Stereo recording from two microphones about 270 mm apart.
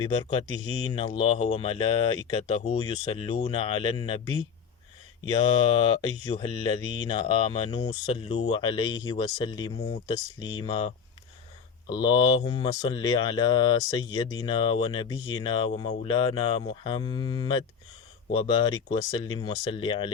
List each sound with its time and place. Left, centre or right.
0.0 s speech: centre
5.4 s speech: centre